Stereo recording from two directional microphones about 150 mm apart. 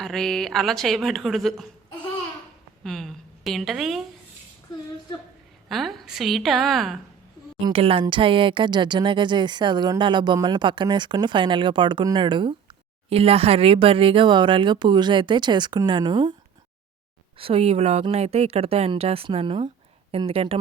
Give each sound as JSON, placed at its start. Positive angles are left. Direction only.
{"t": 0.0, "sound": "speech", "side_deg": 0}
{"t": 2.8, "sound": "a woman's voice", "side_deg": 0}
{"t": 5.6, "sound": "speech", "side_deg": 0}
{"t": 7.6, "sound": "speech", "side_deg": -40}
{"t": 17.3, "sound": "speech", "side_deg": -40}